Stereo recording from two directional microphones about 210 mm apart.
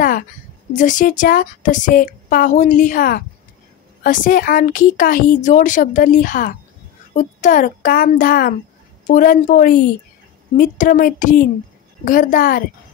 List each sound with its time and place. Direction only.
0.7 s speech: 40° left (ahead or behind)